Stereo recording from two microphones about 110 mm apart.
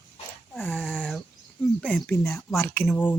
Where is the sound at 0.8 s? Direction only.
5° right (ahead or behind).